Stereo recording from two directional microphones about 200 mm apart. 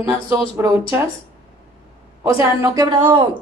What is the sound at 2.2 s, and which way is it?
A woman's voice, 15° right (ahead or behind).